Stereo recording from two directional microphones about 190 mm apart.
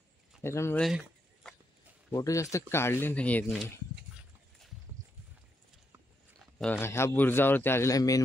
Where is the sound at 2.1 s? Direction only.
15° left (ahead or behind).